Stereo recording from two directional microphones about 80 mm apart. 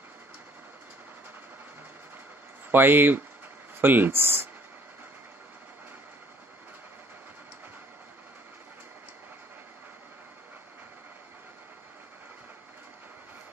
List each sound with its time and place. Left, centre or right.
2.7 s speech: right